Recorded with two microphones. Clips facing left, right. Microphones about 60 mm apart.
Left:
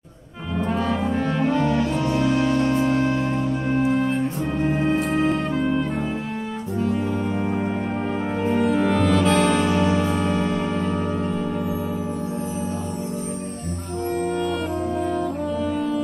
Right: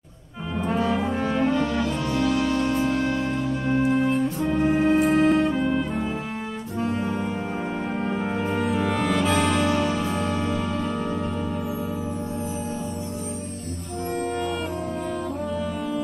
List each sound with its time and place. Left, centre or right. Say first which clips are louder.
0.7 s brass instrument: even; centre
1.5 s music: left 3 dB; centre
4.6 s music: right 3 dB; centre
8.5 s music: left 6 dB; centre
9.6 s music: left 3 dB; centre
14.2 s music: left 2 dB; centre